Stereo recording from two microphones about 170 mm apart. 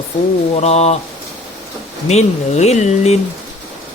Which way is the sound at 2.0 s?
40° left (ahead or behind).